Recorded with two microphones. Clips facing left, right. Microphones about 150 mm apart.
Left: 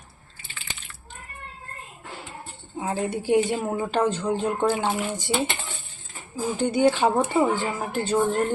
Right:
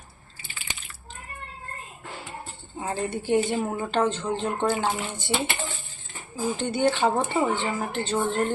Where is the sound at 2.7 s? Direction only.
10° left (ahead or behind).